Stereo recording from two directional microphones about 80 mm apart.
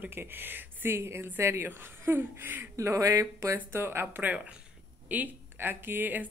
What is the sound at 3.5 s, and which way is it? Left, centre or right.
A woman's voice, right.